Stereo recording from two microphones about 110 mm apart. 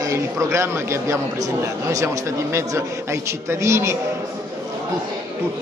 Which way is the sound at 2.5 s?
25° right (ahead or behind).